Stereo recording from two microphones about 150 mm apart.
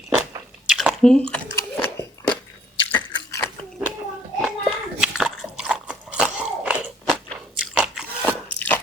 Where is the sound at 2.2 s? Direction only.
20° left (ahead or behind).